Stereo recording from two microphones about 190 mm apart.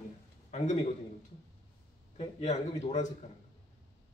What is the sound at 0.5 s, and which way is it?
Speech, 35° left (ahead or behind).